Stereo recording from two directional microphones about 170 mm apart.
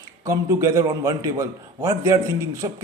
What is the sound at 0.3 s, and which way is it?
A man's voice, 15° right (ahead or behind).